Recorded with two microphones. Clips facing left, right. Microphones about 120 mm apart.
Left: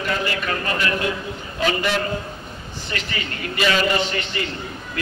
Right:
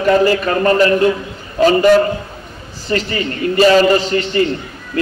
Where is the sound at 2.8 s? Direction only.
35° right (ahead or behind).